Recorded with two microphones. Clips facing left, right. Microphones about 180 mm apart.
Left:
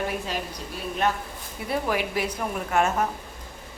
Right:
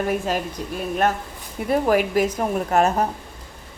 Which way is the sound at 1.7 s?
45° right (ahead or behind).